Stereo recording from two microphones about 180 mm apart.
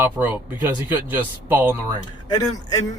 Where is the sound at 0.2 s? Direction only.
10° right (ahead or behind).